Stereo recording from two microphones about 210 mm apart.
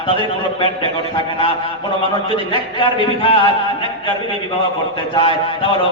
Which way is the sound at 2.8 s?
25° left (ahead or behind).